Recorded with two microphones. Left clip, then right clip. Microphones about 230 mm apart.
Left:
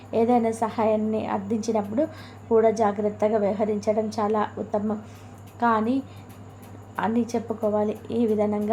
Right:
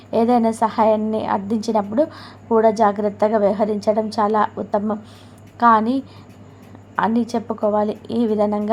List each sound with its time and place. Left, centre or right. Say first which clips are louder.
0.1 s a woman's voice: right 4 dB; centre